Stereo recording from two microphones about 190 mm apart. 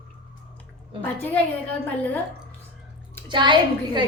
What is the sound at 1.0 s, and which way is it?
Speech, 10° left (ahead or behind).